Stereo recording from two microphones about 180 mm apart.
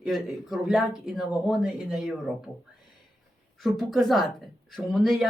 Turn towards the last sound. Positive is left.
turn(degrees=0)  # may be behind; listen again after turning